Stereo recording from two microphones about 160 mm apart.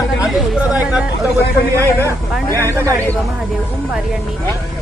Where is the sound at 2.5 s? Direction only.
20° right (ahead or behind).